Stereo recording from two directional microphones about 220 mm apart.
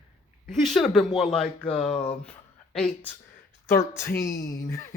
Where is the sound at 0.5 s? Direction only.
Centre (ahead or behind).